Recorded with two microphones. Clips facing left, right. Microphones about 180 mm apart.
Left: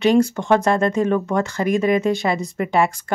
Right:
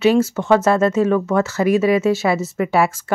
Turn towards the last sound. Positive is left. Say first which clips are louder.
# right 2 dB
turn(degrees=-5)  # may be behind; listen again after turning